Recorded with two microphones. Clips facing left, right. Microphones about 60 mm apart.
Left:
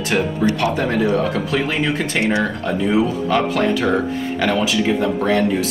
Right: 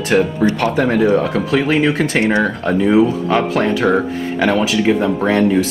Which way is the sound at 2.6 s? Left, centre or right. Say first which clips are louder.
Right 6 dB; centre.